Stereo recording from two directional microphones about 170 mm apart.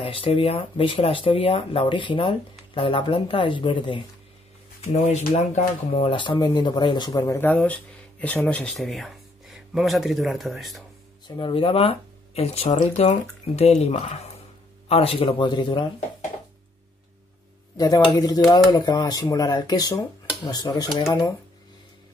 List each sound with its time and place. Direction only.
0.0 s speech: 30° left (ahead or behind)
4.8 s speech: 40° left (ahead or behind); by 7.3 s 25° left (ahead or behind)
7.3 s speech: 10° left (ahead or behind)
11.2 s speech: 30° left (ahead or behind)
17.7 s speech: 20° left (ahead or behind)